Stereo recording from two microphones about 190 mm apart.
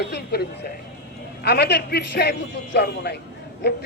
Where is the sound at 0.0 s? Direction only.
60° left (ahead or behind).